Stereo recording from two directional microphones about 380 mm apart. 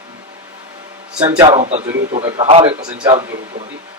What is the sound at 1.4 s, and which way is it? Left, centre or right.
Speech, centre.